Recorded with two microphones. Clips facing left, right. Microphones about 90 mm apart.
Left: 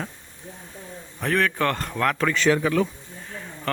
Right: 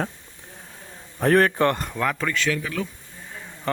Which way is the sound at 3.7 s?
20° right (ahead or behind).